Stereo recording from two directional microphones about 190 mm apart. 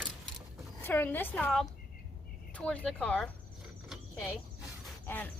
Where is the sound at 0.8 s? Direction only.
10° left (ahead or behind).